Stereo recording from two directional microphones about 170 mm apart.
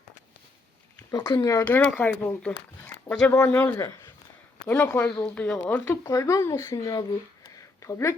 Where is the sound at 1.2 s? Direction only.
20° left (ahead or behind).